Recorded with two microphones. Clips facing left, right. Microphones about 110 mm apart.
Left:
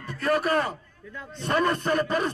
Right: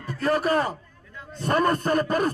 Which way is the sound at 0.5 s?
30° right (ahead or behind).